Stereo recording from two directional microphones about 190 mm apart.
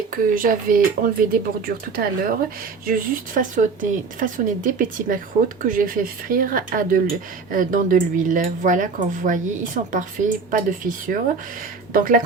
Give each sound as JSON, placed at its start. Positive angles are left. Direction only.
{"t": 0.1, "sound": "speech", "side_deg": -45}